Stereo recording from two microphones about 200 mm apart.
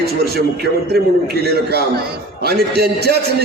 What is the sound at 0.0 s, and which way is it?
A man's voice, 50° right (ahead or behind).